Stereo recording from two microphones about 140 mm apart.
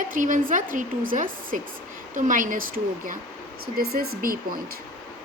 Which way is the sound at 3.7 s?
90° right.